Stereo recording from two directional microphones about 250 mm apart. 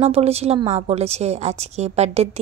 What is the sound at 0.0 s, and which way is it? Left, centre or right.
A woman's voice, right.